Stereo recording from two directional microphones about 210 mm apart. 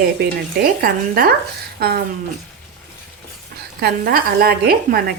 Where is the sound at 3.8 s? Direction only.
45° right (ahead or behind).